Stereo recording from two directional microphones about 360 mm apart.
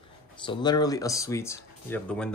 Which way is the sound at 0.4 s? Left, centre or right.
Centre.